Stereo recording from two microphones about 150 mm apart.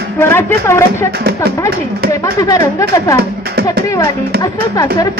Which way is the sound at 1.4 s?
90° right.